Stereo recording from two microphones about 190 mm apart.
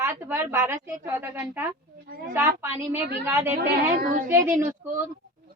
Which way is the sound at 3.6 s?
50° right (ahead or behind).